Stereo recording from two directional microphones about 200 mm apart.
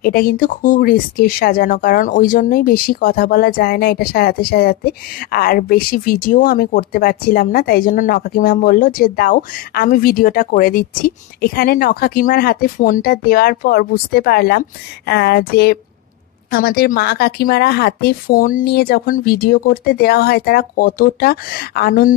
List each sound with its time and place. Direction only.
0.0 s speech: 50° left (ahead or behind)